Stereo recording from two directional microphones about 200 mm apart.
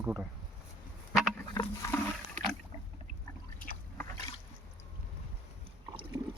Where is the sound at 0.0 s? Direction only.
5° right (ahead or behind).